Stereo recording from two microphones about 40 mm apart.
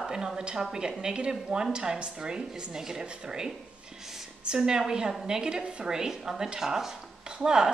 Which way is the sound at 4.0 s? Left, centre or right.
Centre.